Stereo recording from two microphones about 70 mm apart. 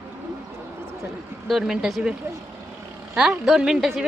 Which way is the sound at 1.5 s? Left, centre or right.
Centre.